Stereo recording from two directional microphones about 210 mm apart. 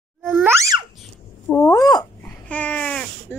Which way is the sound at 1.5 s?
15° left (ahead or behind).